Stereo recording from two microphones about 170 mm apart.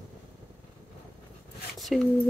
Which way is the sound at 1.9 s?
Centre (ahead or behind).